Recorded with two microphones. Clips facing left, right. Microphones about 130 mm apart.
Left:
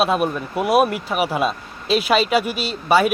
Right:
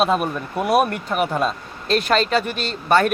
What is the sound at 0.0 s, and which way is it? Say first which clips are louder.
A man's voice: left 1 dB; 5° left (ahead or behind).